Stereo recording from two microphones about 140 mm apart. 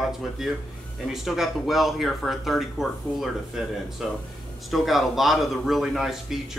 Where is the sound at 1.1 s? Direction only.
Centre (ahead or behind).